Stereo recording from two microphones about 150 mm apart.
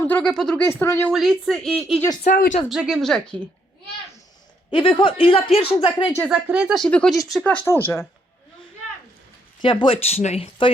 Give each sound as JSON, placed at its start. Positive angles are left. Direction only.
{"t": 0.2, "sound": "speech", "side_deg": 5}
{"t": 1.1, "sound": "speech", "side_deg": 0}
{"t": 2.2, "sound": "speech", "side_deg": 60}
{"t": 2.6, "sound": "speech", "side_deg": -5}
{"t": 4.7, "sound": "speech", "side_deg": 35}
{"t": 6.2, "sound": "speech", "side_deg": -5}
{"t": 6.8, "sound": "speech", "side_deg": 5}
{"t": 9.6, "sound": "speech", "side_deg": 30}